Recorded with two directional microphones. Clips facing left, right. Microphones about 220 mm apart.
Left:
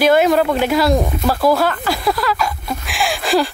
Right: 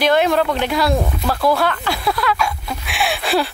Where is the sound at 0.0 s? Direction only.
5° left (ahead or behind).